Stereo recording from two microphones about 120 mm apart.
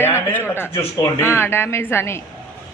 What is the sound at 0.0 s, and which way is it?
A man's voice, 20° left (ahead or behind).